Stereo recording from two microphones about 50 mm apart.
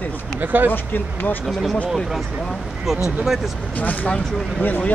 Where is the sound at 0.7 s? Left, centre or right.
Left.